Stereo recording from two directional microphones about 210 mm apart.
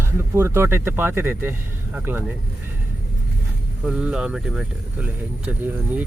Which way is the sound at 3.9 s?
5° right (ahead or behind).